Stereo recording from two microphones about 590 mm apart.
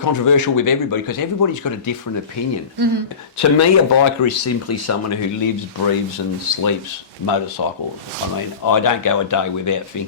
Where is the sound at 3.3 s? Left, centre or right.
Left.